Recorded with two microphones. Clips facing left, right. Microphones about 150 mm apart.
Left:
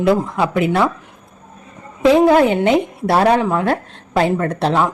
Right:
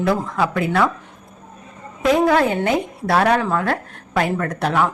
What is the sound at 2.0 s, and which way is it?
Speech, 25° left (ahead or behind).